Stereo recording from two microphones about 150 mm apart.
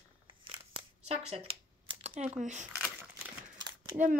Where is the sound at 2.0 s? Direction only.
45° right (ahead or behind).